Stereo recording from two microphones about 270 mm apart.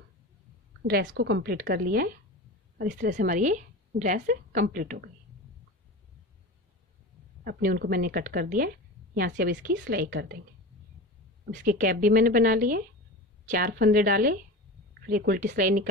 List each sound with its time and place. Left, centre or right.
0.8 s a woman's voice: right
7.4 s a woman's voice: right
11.5 s a woman's voice: right